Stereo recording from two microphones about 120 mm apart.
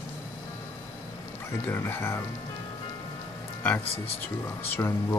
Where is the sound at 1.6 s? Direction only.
20° left (ahead or behind).